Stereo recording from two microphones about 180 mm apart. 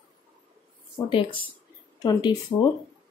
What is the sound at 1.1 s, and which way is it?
Speech, 30° left (ahead or behind).